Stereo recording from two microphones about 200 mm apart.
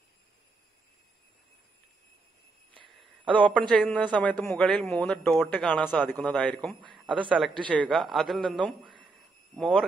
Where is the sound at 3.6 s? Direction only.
5° left (ahead or behind).